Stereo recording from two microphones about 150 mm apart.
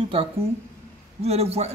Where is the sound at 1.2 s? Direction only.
45° right (ahead or behind).